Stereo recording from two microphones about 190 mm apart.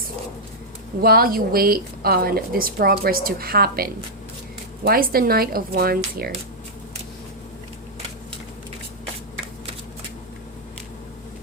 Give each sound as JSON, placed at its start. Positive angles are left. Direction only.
{"t": 1.0, "sound": "a woman's voice", "side_deg": -50}